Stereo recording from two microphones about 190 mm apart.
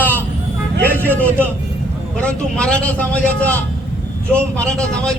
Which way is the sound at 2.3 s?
5° left (ahead or behind).